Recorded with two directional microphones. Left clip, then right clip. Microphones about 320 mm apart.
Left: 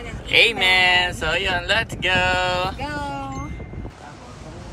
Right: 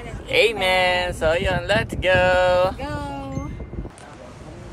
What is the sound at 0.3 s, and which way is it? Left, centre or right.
Speech, centre.